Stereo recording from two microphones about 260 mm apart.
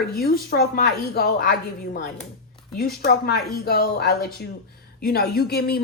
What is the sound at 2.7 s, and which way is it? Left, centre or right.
A woman's voice, left.